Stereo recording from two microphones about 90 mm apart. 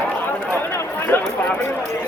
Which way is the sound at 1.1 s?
25° left (ahead or behind).